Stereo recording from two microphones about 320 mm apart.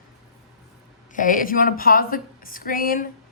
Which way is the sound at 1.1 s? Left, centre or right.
Left.